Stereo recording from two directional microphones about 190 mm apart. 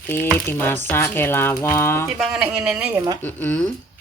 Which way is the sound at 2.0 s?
5° right (ahead or behind).